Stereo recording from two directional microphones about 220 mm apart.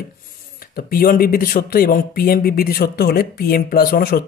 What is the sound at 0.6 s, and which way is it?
Speech, 40° left (ahead or behind).